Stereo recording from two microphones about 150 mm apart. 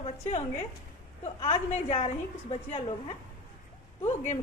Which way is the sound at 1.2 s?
45° left (ahead or behind).